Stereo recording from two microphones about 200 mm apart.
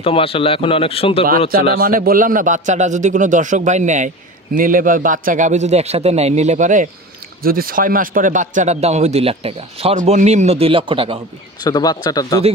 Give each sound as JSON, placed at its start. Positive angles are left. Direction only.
{"t": 0.0, "sound": "a man's voice", "side_deg": 30}
{"t": 1.8, "sound": "speech", "side_deg": -45}
{"t": 11.6, "sound": "a man's voice", "side_deg": 20}